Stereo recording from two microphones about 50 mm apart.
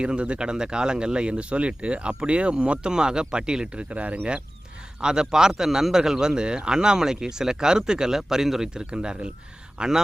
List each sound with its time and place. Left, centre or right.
0.0 s speech: right
3.8 s speech: right
4.9 s a man's voice: centre